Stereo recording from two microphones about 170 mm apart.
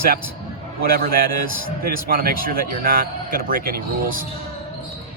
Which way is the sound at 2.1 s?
55° right (ahead or behind).